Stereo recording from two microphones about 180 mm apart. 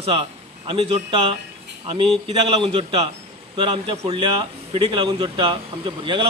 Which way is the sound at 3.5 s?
25° right (ahead or behind).